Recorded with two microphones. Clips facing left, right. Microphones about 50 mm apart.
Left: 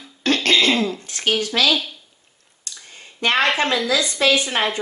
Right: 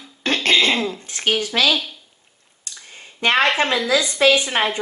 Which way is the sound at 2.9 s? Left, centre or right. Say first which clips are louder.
Right 2 dB; right.